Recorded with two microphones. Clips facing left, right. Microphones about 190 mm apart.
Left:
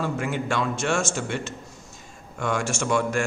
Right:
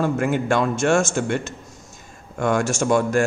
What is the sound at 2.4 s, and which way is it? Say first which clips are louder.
Speech: right 6 dB; 45° right (ahead or behind).